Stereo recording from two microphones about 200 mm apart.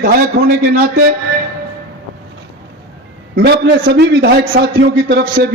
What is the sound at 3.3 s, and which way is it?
A man's voice, 55° right (ahead or behind).